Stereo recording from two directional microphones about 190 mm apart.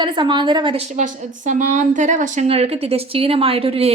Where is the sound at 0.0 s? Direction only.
25° right (ahead or behind).